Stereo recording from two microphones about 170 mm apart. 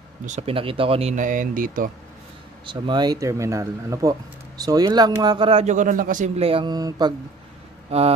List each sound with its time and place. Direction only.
0.3 s speech: 35° right (ahead or behind); by 1.9 s 50° right (ahead or behind)
2.6 s speech: 25° right (ahead or behind)